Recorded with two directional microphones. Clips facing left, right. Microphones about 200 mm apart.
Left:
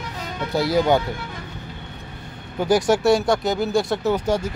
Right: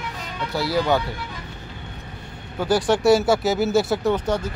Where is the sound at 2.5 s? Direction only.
15° left (ahead or behind).